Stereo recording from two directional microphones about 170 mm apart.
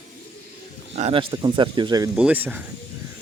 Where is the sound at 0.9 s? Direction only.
35° right (ahead or behind).